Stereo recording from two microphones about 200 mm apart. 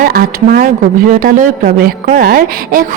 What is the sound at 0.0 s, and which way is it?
A woman's voice, 45° right (ahead or behind).